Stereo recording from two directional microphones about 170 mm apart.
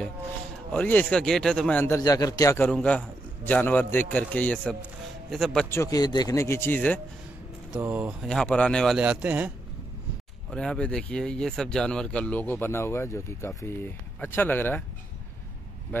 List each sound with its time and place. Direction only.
0.7 s speech: 10° left (ahead or behind)
2.0 s a man's voice: 20° left (ahead or behind)
2.7 s a man's voice: 5° left (ahead or behind)
5.7 s speech: 20° left (ahead or behind)
7.7 s speech: 10° right (ahead or behind)
8.3 s a man's voice: 5° left (ahead or behind)
10.5 s speech: 5° left (ahead or behind)